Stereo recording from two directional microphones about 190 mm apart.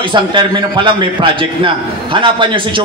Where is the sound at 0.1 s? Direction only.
25° right (ahead or behind).